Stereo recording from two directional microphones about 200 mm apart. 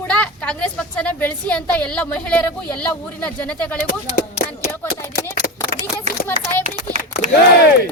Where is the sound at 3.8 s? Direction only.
45° left (ahead or behind).